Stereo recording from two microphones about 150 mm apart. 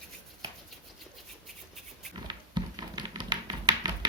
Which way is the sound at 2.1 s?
30° right (ahead or behind).